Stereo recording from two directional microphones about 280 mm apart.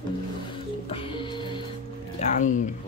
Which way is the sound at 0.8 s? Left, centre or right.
Centre.